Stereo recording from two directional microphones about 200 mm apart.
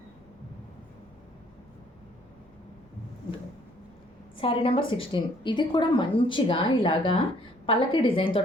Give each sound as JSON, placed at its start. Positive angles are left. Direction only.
{"t": 4.4, "sound": "a woman's voice", "side_deg": 25}